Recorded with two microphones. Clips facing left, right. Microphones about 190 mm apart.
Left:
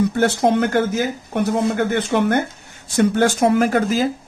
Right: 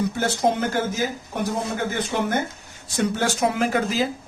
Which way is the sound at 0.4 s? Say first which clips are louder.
Left 4 dB; 65° left (ahead or behind).